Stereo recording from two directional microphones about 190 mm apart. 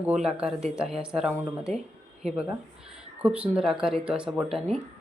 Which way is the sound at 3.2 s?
5° right (ahead or behind).